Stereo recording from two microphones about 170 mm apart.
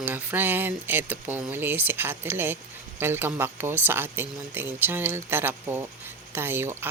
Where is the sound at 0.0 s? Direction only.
10° right (ahead or behind).